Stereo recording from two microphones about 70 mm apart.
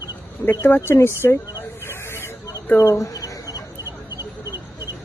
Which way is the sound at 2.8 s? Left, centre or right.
Left.